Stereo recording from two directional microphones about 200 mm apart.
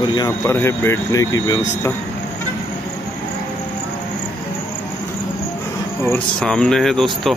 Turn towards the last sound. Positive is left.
turn(degrees=0)  # may be behind; listen again after turning